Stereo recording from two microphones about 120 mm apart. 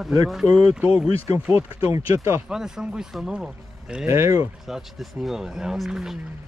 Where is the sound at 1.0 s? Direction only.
55° left (ahead or behind).